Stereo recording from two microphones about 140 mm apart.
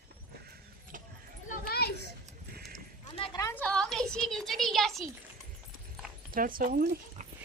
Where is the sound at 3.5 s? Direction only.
10° left (ahead or behind).